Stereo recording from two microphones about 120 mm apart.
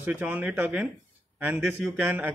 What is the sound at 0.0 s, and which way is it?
Speech, 15° right (ahead or behind).